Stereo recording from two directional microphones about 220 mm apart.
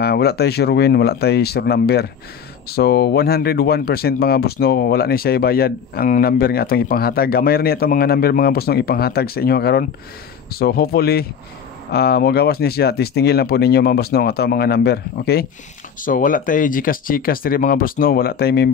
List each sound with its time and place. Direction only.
0.0 s speech: 45° left (ahead or behind)